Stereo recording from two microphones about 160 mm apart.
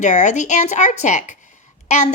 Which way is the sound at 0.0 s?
50° left (ahead or behind).